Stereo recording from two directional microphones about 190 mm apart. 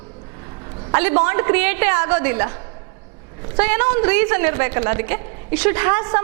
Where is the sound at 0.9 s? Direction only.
15° right (ahead or behind).